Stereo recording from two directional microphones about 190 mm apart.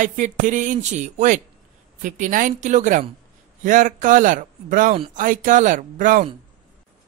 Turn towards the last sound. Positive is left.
turn(degrees=-45)  # may be behind; listen again after turning